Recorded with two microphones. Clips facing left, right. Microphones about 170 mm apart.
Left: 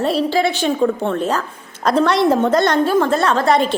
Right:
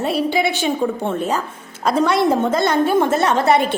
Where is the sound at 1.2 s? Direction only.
10° right (ahead or behind).